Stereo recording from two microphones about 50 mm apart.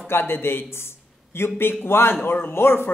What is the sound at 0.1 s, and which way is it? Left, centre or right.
A man's voice, left.